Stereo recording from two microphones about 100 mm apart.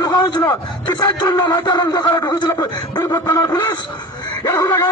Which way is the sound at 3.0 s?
30° left (ahead or behind).